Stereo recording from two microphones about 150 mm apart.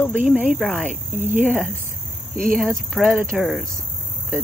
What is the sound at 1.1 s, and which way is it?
Speech, 55° right (ahead or behind).